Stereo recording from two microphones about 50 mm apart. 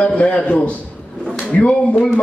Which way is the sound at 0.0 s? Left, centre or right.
Left.